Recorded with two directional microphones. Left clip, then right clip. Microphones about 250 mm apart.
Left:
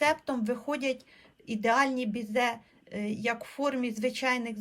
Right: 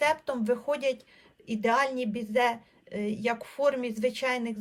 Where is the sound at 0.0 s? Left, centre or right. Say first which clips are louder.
Right 1 dB; centre.